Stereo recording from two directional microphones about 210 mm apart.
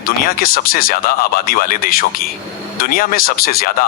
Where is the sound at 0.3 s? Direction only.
45° left (ahead or behind).